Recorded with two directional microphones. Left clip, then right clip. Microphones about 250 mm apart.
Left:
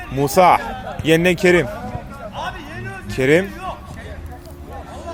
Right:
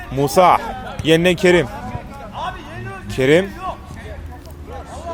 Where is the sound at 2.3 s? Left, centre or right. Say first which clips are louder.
Right 1 dB; left.